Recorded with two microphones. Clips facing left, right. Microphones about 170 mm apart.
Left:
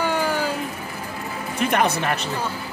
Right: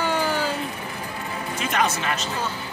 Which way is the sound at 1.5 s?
60° left (ahead or behind).